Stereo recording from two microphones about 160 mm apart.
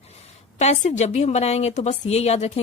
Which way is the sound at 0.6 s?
45° left (ahead or behind).